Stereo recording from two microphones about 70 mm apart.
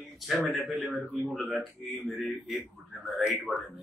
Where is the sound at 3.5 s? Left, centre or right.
Centre.